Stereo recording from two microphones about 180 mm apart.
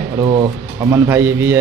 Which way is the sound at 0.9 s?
15° right (ahead or behind).